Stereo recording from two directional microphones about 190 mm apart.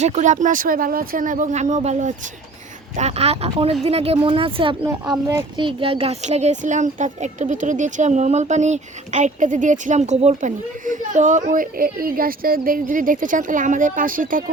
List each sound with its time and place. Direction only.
0.0 s speech: 40° right (ahead or behind)